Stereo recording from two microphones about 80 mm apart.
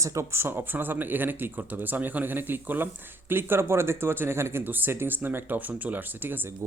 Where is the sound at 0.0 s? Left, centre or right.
Right.